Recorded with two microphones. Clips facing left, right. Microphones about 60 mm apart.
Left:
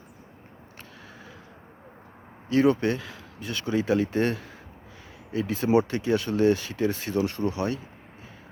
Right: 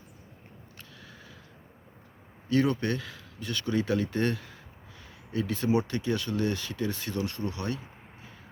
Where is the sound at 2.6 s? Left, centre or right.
Left.